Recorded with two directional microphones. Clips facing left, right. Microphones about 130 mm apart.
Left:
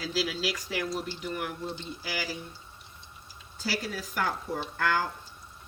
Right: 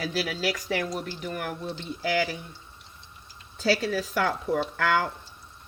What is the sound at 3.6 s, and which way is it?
Speech, 85° right.